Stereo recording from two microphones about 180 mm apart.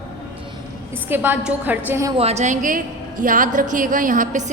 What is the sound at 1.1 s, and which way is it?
A woman's voice, 10° right (ahead or behind).